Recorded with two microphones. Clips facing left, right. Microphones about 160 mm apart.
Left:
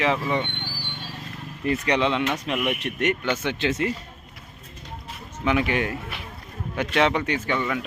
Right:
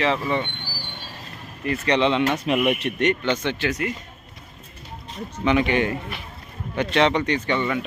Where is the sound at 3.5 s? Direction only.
25° left (ahead or behind).